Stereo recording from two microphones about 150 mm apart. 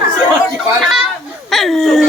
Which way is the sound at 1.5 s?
Centre (ahead or behind).